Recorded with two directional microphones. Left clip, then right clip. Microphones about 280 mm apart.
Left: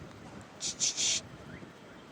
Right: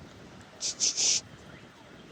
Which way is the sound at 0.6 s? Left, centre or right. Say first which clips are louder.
Right 4 dB; centre.